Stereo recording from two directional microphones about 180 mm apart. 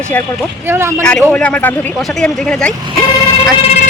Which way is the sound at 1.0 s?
5° left (ahead or behind).